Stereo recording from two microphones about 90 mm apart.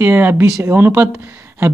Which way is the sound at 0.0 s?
25° right (ahead or behind).